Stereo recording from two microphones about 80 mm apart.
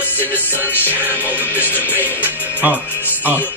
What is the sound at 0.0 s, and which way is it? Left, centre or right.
Music, left.